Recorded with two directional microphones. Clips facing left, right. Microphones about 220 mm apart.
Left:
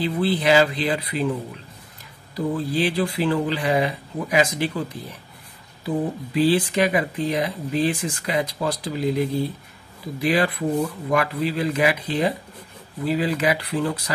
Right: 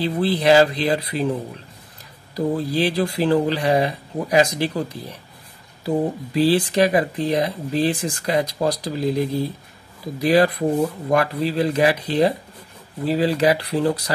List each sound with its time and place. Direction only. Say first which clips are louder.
0.0 s speech: right 2 dB; 35° right (ahead or behind)
2.3 s speech: right 2 dB; 40° right (ahead or behind)